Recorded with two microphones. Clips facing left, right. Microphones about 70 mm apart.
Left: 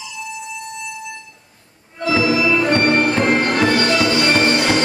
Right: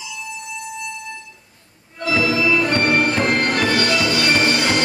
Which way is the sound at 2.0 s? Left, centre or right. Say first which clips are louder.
Left 2 dB; centre.